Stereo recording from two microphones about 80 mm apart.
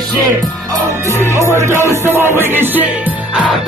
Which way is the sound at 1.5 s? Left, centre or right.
Right.